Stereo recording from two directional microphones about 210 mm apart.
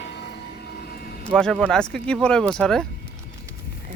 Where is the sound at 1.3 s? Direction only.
5° left (ahead or behind).